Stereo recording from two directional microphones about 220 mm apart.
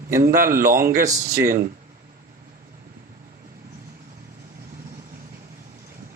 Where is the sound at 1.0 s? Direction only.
15° right (ahead or behind).